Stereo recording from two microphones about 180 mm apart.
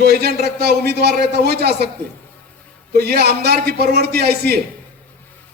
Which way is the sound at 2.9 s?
60° right (ahead or behind).